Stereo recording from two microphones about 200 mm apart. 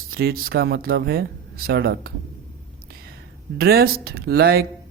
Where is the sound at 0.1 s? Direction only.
50° right (ahead or behind).